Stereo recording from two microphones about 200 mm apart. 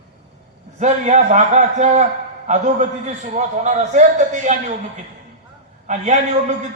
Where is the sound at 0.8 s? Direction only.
35° right (ahead or behind).